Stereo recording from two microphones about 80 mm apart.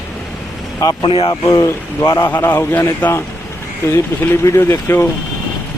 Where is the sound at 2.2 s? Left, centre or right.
Left.